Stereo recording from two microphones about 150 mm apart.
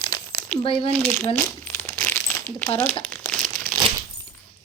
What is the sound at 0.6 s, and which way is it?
Speech, 35° left (ahead or behind).